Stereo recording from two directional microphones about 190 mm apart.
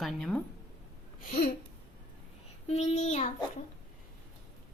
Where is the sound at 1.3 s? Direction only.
50° left (ahead or behind).